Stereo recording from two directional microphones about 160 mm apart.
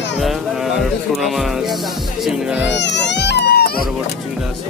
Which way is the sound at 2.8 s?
90° left.